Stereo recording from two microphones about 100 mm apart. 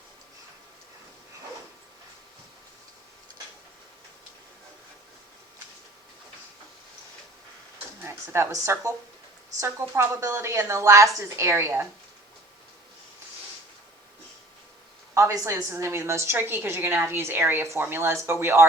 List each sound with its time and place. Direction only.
8.0 s a woman's voice: 25° right (ahead or behind)
15.1 s a woman's voice: 30° right (ahead or behind)